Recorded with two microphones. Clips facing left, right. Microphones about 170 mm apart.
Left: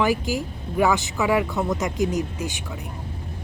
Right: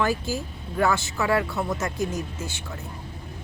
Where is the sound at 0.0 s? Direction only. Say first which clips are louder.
Left 3 dB; 15° left (ahead or behind).